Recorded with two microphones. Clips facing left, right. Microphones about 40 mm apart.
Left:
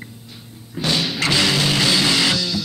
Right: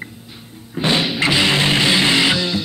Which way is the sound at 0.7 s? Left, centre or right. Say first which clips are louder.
Right 3 dB; right.